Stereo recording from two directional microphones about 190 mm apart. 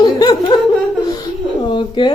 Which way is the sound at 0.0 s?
20° left (ahead or behind).